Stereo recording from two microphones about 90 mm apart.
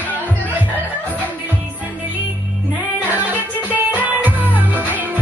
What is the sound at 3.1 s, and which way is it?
Music, 20° right (ahead or behind).